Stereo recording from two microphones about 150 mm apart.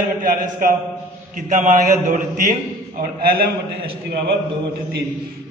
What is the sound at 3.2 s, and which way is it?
Speech, 85° right.